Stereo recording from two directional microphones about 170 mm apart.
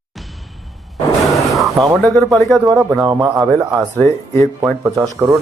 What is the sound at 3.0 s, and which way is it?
Speech, 25° right (ahead or behind).